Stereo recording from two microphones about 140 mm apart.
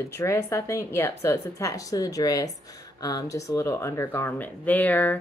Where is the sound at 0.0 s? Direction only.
20° left (ahead or behind).